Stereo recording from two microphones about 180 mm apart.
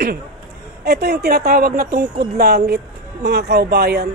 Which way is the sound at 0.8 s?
60° right (ahead or behind).